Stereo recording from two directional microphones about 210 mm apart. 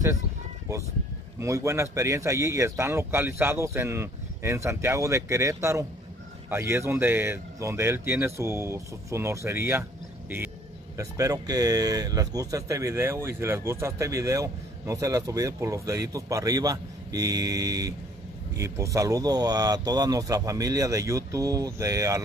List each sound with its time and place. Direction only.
1.4 s speech: 15° right (ahead or behind)
11.0 s speech: 15° right (ahead or behind)